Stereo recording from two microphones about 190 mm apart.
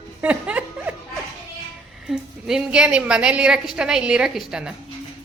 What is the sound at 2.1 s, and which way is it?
A woman's voice, 5° right (ahead or behind).